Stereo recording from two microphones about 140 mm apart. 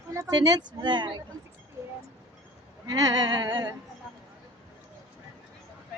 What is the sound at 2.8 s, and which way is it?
Speech, 30° right (ahead or behind).